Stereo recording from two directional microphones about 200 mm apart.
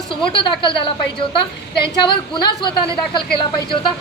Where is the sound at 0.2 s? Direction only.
25° left (ahead or behind).